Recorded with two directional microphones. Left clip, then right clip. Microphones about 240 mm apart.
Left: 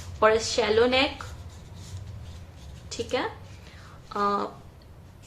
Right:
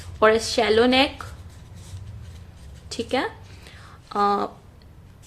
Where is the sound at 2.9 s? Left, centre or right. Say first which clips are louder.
Right 4 dB; right.